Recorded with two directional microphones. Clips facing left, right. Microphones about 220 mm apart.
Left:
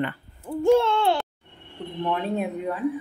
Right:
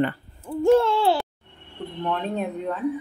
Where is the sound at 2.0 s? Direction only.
10° left (ahead or behind).